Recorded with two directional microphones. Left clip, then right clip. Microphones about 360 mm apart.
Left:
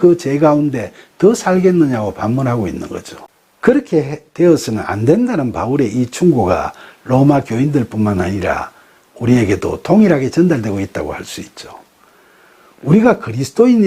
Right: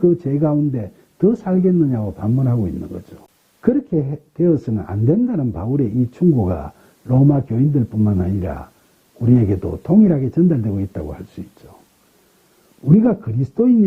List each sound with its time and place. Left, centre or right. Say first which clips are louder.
0.0 s speech: left 6 dB; centre
13.0 s speech: left 10 dB; centre